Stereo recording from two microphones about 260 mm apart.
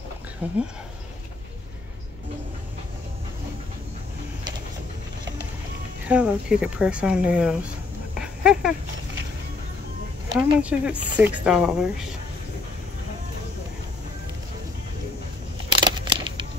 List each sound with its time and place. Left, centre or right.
0.4 s speech: centre
6.0 s speech: centre
8.1 s dog: centre
10.3 s speech: centre
15.8 s a sound: centre